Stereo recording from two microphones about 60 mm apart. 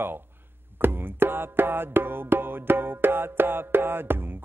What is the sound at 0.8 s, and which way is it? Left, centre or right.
Music, right.